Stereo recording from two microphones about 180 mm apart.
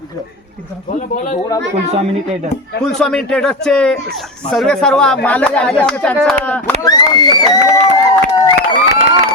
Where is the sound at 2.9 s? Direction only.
5° left (ahead or behind).